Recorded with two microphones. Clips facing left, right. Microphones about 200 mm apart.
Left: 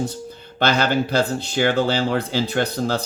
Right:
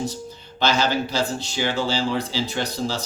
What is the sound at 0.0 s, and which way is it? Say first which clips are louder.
Speech: left 2 dB; 55° left (ahead or behind).